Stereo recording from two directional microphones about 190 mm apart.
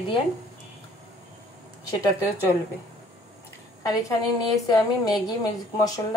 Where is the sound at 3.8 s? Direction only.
20° left (ahead or behind).